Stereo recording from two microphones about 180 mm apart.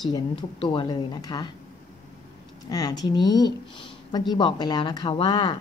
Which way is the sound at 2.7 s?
20° left (ahead or behind).